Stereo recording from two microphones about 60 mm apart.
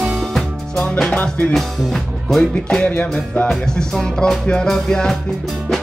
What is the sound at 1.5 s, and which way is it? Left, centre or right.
Music, centre.